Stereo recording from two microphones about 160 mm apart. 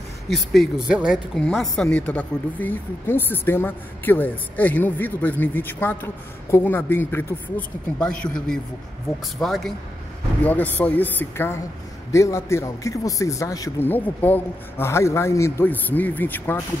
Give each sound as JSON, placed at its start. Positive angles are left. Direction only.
{"t": 0.3, "sound": "a woman's voice", "side_deg": 0}